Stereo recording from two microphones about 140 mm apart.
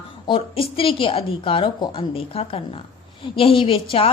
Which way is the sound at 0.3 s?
40° left (ahead or behind).